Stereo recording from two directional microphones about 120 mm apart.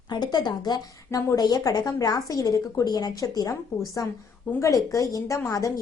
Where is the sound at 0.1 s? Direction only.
35° left (ahead or behind).